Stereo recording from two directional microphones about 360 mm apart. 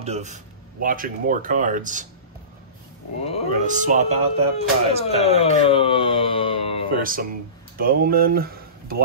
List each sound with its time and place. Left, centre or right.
0.0 s speech: centre
3.3 s speech: centre
3.6 s speech: right
5.0 s speech: centre
7.0 s speech: right